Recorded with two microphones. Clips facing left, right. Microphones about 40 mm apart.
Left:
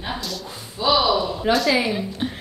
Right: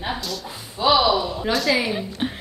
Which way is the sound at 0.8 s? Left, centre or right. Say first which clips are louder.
Right 1 dB; centre.